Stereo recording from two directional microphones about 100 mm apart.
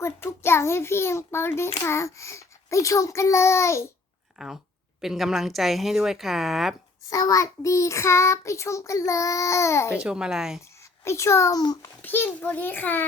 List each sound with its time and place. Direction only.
0.0 s a child's voice: 25° left (ahead or behind)
4.4 s speech: 5° right (ahead or behind)
7.1 s child singing: 35° left (ahead or behind)
9.9 s a child's voice: 10° right (ahead or behind)
11.0 s a child's voice: 25° left (ahead or behind)
11.5 s child singing: 40° left (ahead or behind)
12.0 s a child's voice: 20° left (ahead or behind)